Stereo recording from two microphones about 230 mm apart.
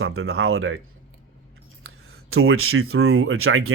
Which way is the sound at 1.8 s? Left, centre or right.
Right.